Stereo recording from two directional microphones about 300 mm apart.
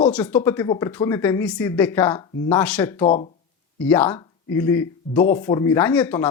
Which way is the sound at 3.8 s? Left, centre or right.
Centre.